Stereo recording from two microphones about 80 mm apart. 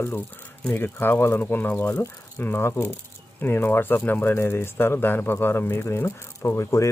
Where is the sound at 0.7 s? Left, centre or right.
Left.